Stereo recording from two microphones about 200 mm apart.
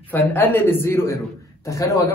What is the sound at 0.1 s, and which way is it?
A man's voice, 10° left (ahead or behind).